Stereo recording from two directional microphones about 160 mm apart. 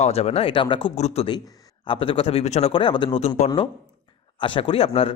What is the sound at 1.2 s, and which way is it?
Speech, 30° left (ahead or behind).